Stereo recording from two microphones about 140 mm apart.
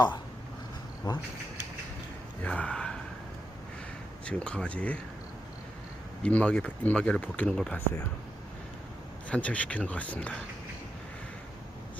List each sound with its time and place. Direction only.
1.0 s a sound: 30° left (ahead or behind)
2.4 s speech: 10° left (ahead or behind)
4.3 s speech: 10° left (ahead or behind)
6.2 s speech: 10° left (ahead or behind)
9.3 s speech: 10° left (ahead or behind)